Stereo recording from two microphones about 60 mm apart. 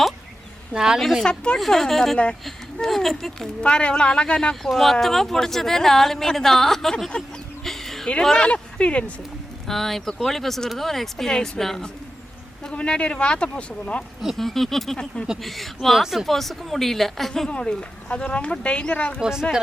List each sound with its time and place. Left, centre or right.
0.7 s speech: centre
0.9 s speech: centre
1.2 s speech: centre
1.5 s speech: centre
3.6 s speech: centre
7.6 s a sound: centre
8.2 s speech: centre
9.6 s speech: centre
14.3 s speech: centre
14.9 s speech: centre
15.4 s speech: centre
19.2 s speech: centre